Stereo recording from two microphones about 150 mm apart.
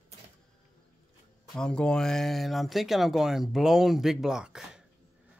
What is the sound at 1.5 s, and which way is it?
Speech, 5° left (ahead or behind).